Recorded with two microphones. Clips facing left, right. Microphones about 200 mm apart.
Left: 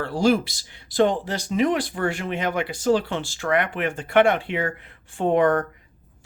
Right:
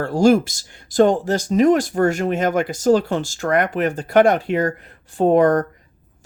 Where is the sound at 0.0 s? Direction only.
45° right (ahead or behind).